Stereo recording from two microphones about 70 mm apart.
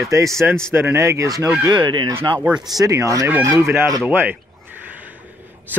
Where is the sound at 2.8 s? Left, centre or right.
Right.